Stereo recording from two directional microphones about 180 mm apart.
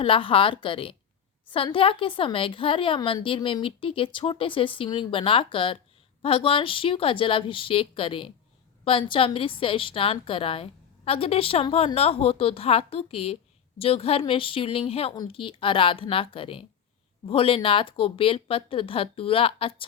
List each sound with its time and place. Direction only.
0.0 s a woman's voice: 30° left (ahead or behind)